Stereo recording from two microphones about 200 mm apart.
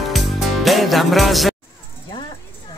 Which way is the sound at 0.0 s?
Centre (ahead or behind).